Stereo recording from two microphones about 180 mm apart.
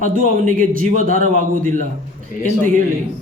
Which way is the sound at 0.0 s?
45° right (ahead or behind).